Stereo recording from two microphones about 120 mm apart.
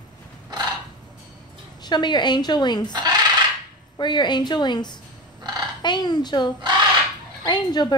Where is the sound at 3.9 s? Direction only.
40° left (ahead or behind).